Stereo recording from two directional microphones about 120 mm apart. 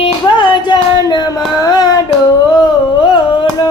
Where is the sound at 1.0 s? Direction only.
30° left (ahead or behind).